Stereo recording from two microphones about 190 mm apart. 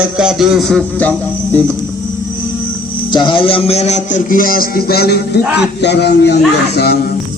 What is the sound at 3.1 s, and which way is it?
A man's voice, 25° left (ahead or behind).